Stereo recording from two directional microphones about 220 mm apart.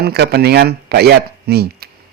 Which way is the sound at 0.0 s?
45° right (ahead or behind).